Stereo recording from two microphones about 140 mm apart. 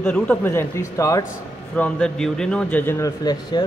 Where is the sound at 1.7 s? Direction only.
10° left (ahead or behind); by 3.6 s 30° left (ahead or behind).